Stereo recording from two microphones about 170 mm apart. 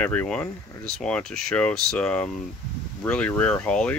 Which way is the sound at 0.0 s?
10° left (ahead or behind).